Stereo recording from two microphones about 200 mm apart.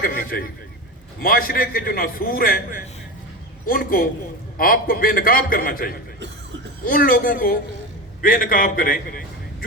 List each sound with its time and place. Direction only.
0.0 s a man's voice: 45° left (ahead or behind)